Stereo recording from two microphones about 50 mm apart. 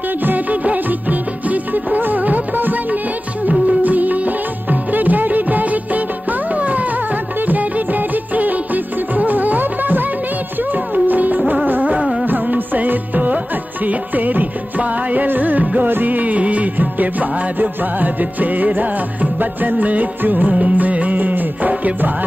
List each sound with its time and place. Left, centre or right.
0.2 s music: right
3.4 s music of bollywood: right
6.5 s music: right
7.4 s music of bollywood: right
10.7 s music: right